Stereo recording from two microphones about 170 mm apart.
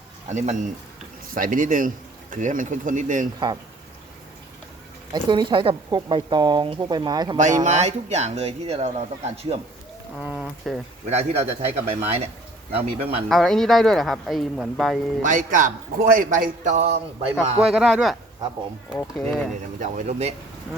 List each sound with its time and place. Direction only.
1.3 s a man's voice: 50° right (ahead or behind)
5.1 s speech: 30° right (ahead or behind)
7.3 s speech: 45° right (ahead or behind)
10.2 s speech: 5° right (ahead or behind)
11.0 s speech: 40° right (ahead or behind)
13.2 s speech: centre (ahead or behind)
15.2 s a man's voice: 50° right (ahead or behind)
17.7 s speech: 5° right (ahead or behind)
19.8 s a man's voice: 45° right (ahead or behind)